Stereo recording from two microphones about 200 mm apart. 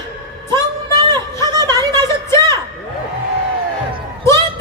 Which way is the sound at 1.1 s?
20° right (ahead or behind).